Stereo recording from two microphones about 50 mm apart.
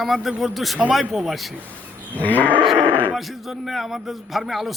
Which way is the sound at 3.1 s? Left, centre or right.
Centre.